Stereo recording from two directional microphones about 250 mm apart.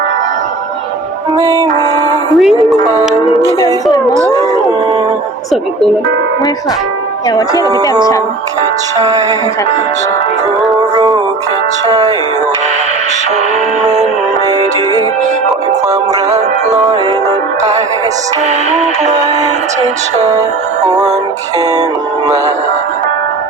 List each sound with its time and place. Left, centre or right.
1.4 s speech: centre
2.3 s speech: centre
7.5 s speech: centre
9.0 s speech: centre
10.9 s music: centre
11.9 s speech: centre
16.3 s music: right
20.8 s speech: centre